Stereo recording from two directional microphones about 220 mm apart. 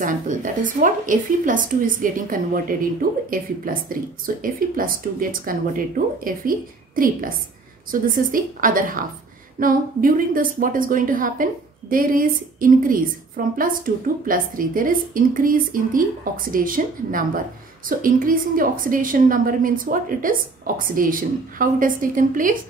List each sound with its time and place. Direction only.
0.0 s a woman's voice: 35° right (ahead or behind)